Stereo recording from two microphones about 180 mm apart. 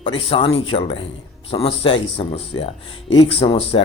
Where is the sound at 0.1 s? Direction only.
30° left (ahead or behind).